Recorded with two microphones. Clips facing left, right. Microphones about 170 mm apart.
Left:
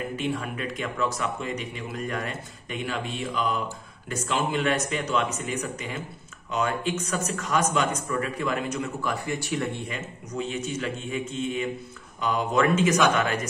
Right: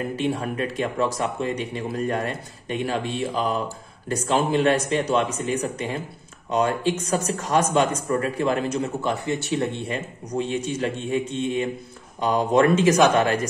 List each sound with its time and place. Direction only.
0.1 s speech: 35° right (ahead or behind)